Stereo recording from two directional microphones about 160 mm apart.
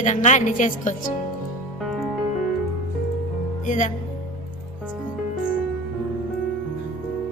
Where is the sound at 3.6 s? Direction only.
55° left (ahead or behind).